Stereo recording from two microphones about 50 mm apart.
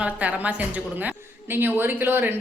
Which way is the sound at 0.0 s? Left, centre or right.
Right.